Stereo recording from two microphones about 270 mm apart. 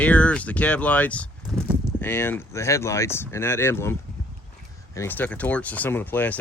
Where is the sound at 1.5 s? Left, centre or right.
Centre.